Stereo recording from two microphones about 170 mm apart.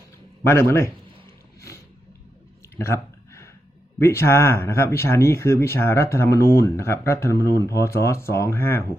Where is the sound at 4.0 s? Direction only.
15° left (ahead or behind).